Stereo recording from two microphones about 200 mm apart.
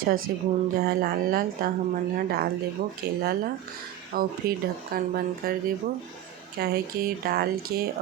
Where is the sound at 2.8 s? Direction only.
45° right (ahead or behind).